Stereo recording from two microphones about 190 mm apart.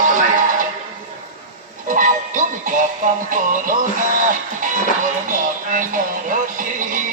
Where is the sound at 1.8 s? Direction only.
45° right (ahead or behind).